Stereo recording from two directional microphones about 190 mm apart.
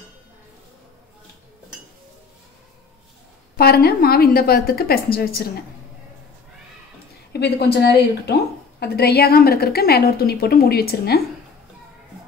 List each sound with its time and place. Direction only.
3.5 s a woman's voice: 55° left (ahead or behind)
7.3 s a woman's voice: 60° left (ahead or behind)